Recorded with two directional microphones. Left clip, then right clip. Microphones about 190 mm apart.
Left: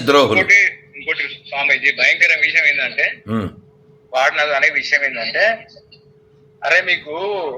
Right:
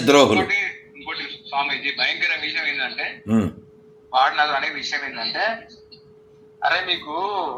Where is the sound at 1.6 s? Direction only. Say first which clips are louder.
Left 13 dB; 40° left (ahead or behind).